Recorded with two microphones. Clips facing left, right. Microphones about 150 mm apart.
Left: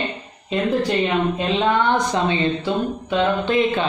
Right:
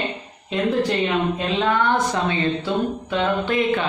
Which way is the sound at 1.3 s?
20° left (ahead or behind).